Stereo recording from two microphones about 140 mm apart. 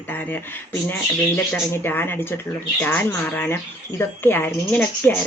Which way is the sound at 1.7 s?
15° left (ahead or behind).